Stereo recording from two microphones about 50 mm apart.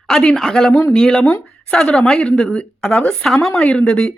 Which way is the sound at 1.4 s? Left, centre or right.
Centre.